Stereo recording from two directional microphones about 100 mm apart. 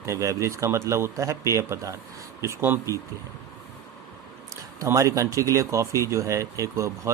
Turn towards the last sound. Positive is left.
turn(degrees=-30)  # may be behind; listen again after turning